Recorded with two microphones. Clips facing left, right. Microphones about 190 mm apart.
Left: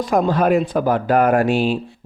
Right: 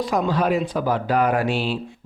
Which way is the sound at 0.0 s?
45° left (ahead or behind).